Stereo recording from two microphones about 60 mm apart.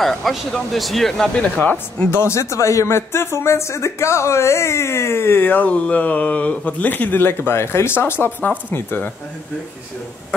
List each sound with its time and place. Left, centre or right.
0.0 s speech: centre
1.6 s speech: left
2.0 s speech: left